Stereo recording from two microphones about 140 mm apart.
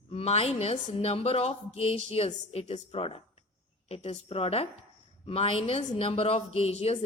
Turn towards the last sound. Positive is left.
turn(degrees=50)  # may be behind; listen again after turning